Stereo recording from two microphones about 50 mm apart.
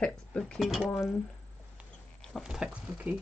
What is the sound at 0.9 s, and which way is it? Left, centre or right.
Speech, left.